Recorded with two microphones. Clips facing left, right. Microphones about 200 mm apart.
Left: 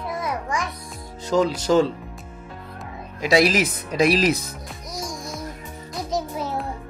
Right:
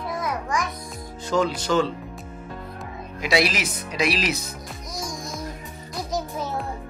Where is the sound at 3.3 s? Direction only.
45° left (ahead or behind).